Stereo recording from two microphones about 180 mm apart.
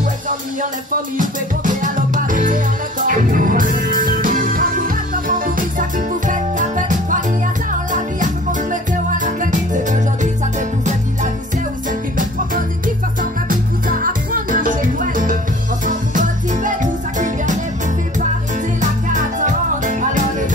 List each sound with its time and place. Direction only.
1.1 s music: 45° right (ahead or behind)
12.2 s music: 50° right (ahead or behind)
18.8 s music: 45° right (ahead or behind)